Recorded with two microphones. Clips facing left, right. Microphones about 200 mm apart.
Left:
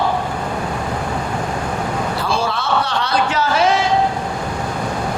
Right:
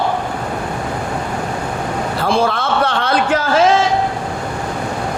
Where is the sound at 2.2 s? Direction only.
55° right (ahead or behind).